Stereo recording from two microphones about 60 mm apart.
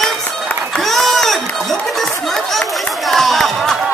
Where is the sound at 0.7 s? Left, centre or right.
Centre.